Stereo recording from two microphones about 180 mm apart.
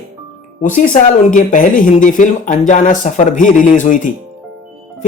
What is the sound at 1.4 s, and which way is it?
Speech, 45° left (ahead or behind).